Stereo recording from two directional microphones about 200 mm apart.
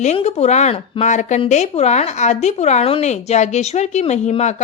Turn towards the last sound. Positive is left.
turn(degrees=35)  # may be behind; listen again after turning